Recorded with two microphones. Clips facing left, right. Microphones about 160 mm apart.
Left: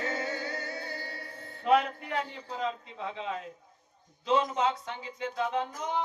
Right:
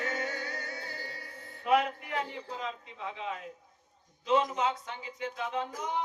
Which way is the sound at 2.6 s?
30° left (ahead or behind).